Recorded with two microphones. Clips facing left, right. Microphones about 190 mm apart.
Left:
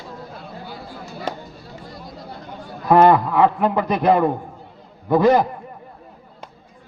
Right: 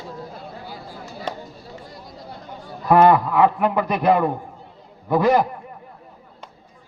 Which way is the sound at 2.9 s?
20° left (ahead or behind).